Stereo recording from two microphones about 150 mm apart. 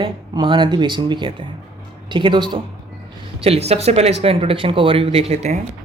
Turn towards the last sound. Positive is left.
turn(degrees=-45)  # may be behind; listen again after turning